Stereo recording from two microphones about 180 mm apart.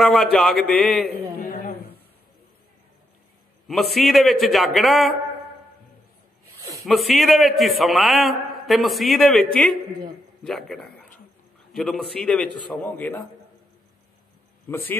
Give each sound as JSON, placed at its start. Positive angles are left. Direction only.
{"t": 0.0, "sound": "a man's voice", "side_deg": 0}
{"t": 1.4, "sound": "a sound", "side_deg": 50}
{"t": 3.6, "sound": "a man's voice", "side_deg": 0}
{"t": 6.9, "sound": "a man's voice", "side_deg": 0}
{"t": 14.7, "sound": "speech", "side_deg": 10}